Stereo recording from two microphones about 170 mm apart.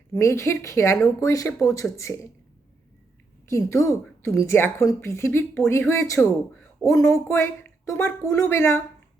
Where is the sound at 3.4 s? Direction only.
15° left (ahead or behind).